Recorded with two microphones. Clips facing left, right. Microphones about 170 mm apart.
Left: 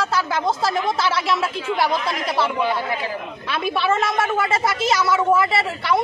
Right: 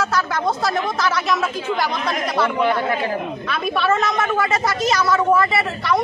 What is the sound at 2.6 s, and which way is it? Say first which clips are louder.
Speech: right 3 dB; 50° right (ahead or behind).